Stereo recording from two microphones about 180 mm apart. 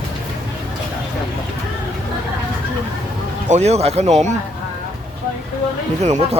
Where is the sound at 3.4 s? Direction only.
40° right (ahead or behind).